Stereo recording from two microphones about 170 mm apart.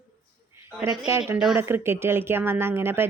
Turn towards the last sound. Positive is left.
turn(degrees=-15)  # may be behind; listen again after turning